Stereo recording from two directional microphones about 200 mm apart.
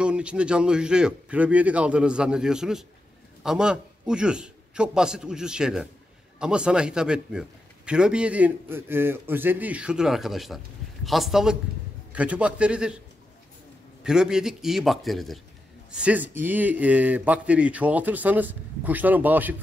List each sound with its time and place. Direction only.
0.0 s a man's voice: 5° right (ahead or behind)
14.0 s a man's voice: 5° right (ahead or behind)